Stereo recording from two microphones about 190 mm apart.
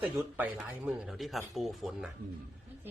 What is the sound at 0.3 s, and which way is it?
A man's voice, 5° right (ahead or behind).